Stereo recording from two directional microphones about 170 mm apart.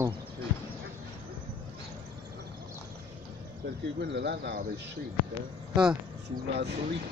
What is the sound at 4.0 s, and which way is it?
Speech, 80° right.